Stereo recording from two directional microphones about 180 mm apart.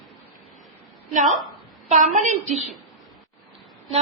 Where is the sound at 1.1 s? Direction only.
45° right (ahead or behind).